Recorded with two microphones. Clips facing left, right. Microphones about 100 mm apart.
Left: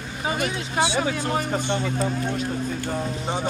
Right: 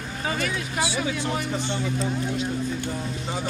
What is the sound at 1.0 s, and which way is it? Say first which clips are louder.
Speech: left 2 dB; 45° left (ahead or behind).